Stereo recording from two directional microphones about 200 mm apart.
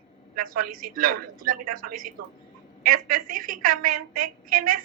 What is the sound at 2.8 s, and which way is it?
A woman's voice, 45° right (ahead or behind).